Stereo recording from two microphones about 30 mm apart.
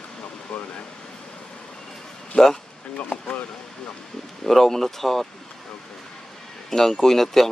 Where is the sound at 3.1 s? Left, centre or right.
Left.